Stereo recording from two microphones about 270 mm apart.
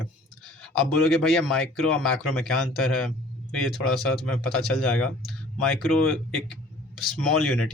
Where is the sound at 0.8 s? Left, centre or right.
Centre.